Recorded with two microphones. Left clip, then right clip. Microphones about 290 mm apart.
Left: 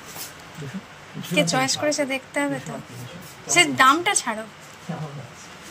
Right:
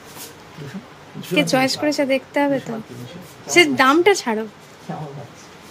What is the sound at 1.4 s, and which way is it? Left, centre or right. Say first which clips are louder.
A woman's voice: right 3 dB; centre.